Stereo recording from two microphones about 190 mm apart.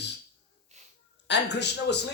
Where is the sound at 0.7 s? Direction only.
40° right (ahead or behind).